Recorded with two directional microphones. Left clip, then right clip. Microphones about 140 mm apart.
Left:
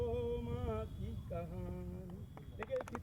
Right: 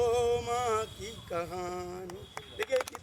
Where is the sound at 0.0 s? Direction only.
20° right (ahead or behind).